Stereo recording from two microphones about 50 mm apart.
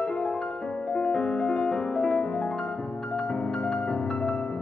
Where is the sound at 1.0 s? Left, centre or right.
Left.